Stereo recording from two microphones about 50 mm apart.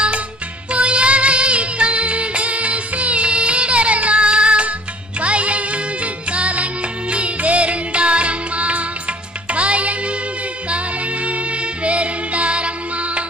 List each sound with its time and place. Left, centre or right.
0.7 s music: right